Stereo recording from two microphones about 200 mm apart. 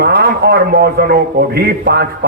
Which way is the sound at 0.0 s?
50° right (ahead or behind).